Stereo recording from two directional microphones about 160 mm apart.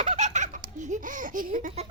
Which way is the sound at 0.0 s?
45° right (ahead or behind).